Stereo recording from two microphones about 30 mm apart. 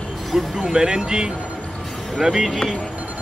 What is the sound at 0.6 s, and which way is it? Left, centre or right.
Speech, right.